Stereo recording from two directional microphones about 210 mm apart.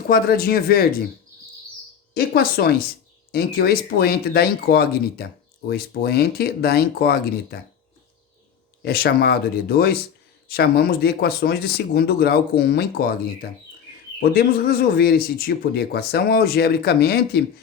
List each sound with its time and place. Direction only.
0.1 s speech: 45° left (ahead or behind)
2.1 s speech: 45° left (ahead or behind)
8.8 s speech: 50° left (ahead or behind)
14.2 s speech: 45° left (ahead or behind)